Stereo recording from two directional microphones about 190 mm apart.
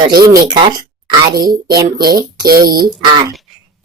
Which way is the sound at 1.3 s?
55° right (ahead or behind).